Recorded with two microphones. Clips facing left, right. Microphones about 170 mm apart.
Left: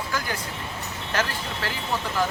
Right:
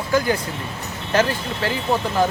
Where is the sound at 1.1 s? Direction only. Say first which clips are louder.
Right 8 dB; 20° right (ahead or behind).